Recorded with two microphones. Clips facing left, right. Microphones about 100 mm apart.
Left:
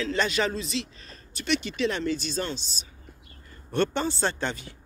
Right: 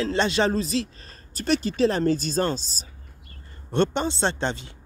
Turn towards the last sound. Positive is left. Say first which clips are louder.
# right 3 dB
turn(degrees=-25)  # may be behind; listen again after turning